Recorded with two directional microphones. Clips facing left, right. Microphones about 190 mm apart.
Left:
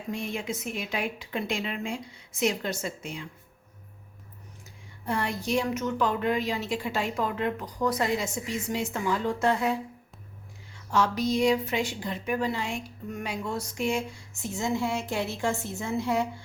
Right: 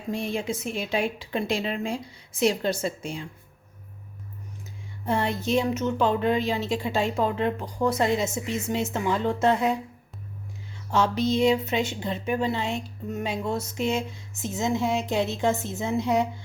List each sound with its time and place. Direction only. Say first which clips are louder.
0.1 s a woman's voice: right 4 dB; 30° right (ahead or behind)
5.0 s a woman's voice: right 4 dB; 25° right (ahead or behind)
10.9 s a woman's voice: right 2 dB; 25° right (ahead or behind)